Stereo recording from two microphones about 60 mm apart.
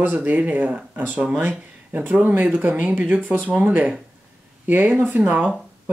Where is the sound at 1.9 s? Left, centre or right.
Right.